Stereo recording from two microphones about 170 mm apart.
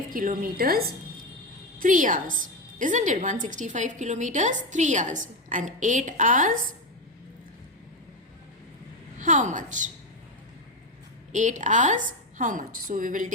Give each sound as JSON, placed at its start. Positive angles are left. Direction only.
{"t": 0.1, "sound": "a woman's voice", "side_deg": -55}
{"t": 1.8, "sound": "a woman's voice", "side_deg": -50}
{"t": 9.2, "sound": "a woman's voice", "side_deg": -50}
{"t": 11.3, "sound": "a woman's voice", "side_deg": -45}